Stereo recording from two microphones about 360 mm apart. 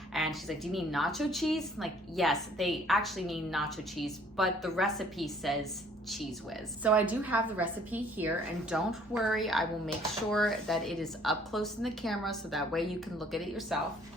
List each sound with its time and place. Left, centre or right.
0.1 s a woman's voice: centre
6.8 s a woman's voice: centre